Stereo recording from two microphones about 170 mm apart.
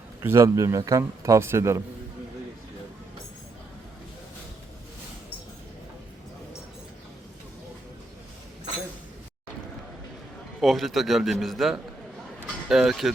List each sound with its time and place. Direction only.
0.2 s a man's voice: 15° right (ahead or behind)
10.6 s a man's voice: centre (ahead or behind)